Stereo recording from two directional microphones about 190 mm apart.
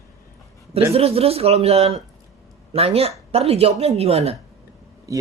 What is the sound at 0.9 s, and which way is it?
Speech, 30° right (ahead or behind).